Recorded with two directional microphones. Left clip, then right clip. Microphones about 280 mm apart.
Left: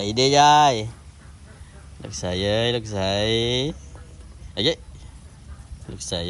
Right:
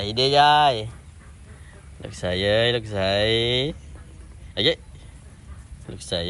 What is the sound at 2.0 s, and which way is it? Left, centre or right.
A man's voice, centre.